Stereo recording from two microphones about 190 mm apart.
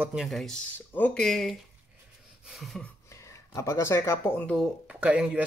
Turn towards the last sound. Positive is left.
turn(degrees=-5)  # may be behind; listen again after turning